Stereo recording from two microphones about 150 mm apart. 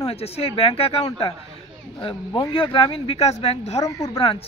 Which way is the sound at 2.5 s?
35° left (ahead or behind).